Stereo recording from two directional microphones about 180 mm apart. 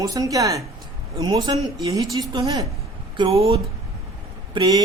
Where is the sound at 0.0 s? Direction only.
20° right (ahead or behind).